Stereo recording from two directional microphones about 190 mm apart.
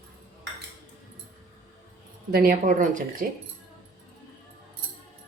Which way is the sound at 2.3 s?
50° right (ahead or behind).